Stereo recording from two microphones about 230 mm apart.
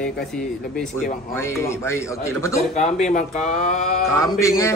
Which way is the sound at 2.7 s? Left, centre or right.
Left.